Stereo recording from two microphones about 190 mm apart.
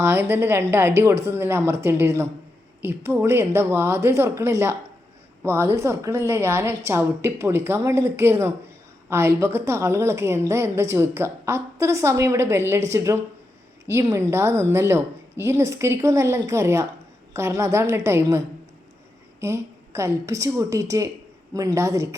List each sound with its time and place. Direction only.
0.0 s a woman's voice: 10° right (ahead or behind)